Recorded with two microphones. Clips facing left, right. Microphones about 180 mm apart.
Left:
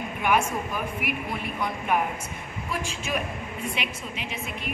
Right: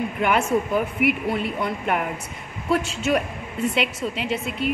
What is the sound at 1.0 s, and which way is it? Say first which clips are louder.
A woman's voice: right 9 dB; 65° right (ahead or behind).